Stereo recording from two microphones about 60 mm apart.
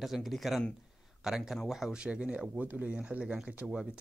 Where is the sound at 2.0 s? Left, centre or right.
Centre.